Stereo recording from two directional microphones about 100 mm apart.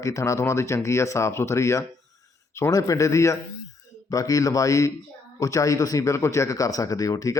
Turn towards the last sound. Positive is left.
turn(degrees=35)  # may be behind; listen again after turning